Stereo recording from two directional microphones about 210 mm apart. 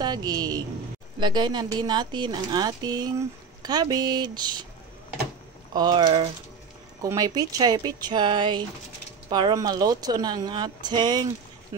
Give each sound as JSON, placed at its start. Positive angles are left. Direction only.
{"t": 0.0, "sound": "speech", "side_deg": -20}
{"t": 5.7, "sound": "speech", "side_deg": -20}